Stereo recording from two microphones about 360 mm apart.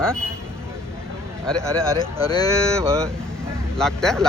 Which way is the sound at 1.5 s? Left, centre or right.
Centre.